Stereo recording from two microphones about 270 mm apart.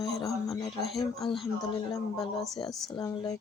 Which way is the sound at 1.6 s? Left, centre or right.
Centre.